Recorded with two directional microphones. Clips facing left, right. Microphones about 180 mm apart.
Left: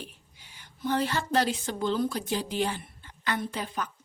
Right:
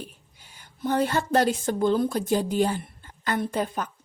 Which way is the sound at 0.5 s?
50° right (ahead or behind).